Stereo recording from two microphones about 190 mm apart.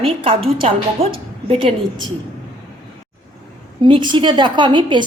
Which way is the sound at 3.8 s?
25° right (ahead or behind).